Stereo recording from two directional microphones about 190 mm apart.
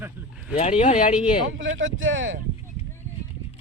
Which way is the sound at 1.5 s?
90° right.